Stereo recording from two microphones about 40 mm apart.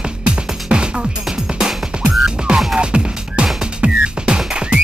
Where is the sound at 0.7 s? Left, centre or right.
Right.